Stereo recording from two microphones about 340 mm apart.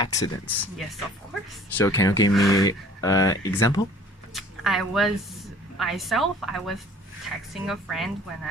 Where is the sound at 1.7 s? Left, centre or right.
Centre.